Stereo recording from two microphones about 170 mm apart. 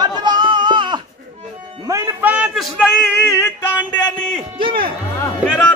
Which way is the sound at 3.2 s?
15° left (ahead or behind).